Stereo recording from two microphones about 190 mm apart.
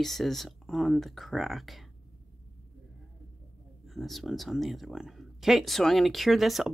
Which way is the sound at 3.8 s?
Centre (ahead or behind).